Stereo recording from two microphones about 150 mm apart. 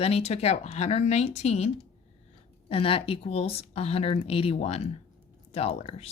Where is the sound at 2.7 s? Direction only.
40° left (ahead or behind).